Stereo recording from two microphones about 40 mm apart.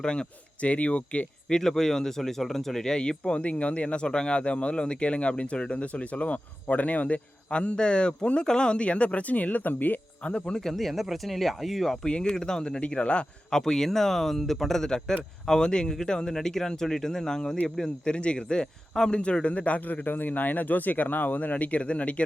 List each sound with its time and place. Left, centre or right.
0.0 s speech: left
0.6 s speech: left
1.5 s speech: centre; by 10.0 s left
10.2 s speech: left
10.6 s speech: centre
12.0 s speech: left
13.5 s speech: centre
18.0 s speech: left